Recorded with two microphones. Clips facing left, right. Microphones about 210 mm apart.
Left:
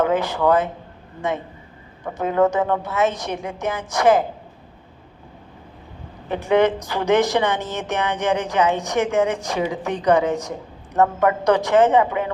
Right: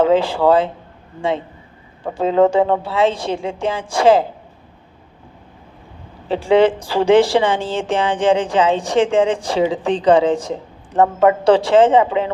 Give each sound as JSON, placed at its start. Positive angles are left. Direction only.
{"t": 0.0, "sound": "a woman's voice", "side_deg": -30}
{"t": 2.1, "sound": "a woman's voice", "side_deg": -25}
{"t": 6.2, "sound": "a woman's voice", "side_deg": -30}